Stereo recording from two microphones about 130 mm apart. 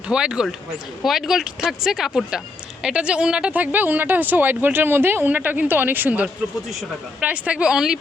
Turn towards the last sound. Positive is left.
turn(degrees=-5)  # may be behind; listen again after turning